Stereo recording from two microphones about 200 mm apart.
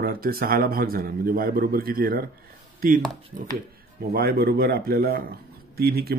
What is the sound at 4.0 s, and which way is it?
Speech, 50° right (ahead or behind).